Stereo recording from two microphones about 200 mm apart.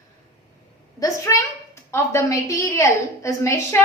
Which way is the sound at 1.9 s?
15° left (ahead or behind).